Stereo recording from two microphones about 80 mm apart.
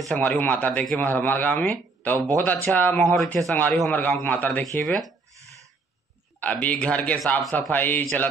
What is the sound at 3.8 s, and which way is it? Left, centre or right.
Speech, centre.